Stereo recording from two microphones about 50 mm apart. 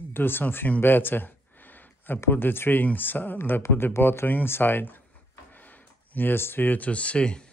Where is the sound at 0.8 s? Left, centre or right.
Left.